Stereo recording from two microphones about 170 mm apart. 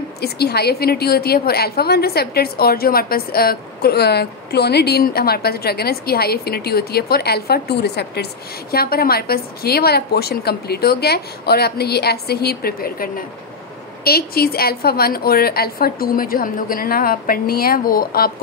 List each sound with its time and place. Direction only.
0.2 s a woman's voice: 70° left (ahead or behind)
8.7 s a woman's voice: 60° left (ahead or behind)